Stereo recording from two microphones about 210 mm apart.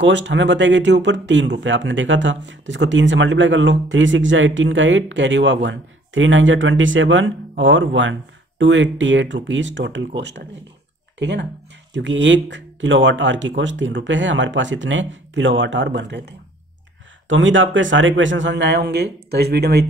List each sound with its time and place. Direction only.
0.0 s speech: 60° right (ahead or behind)